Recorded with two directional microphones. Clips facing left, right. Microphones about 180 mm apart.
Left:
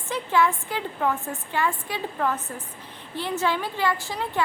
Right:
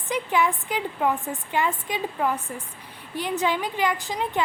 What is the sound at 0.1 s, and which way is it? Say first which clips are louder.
A woman's voice: left 1 dB; 15° right (ahead or behind).